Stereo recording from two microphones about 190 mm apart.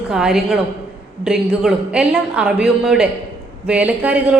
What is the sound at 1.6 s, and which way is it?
A woman's voice, 5° right (ahead or behind).